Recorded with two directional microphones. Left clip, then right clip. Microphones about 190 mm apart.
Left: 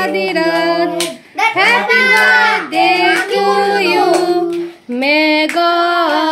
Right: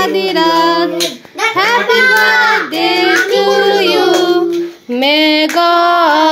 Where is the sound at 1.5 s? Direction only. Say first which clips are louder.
Even; 15° left (ahead or behind).